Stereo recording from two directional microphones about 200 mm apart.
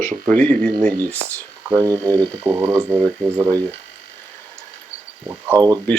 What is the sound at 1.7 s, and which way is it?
Speech, 15° right (ahead or behind).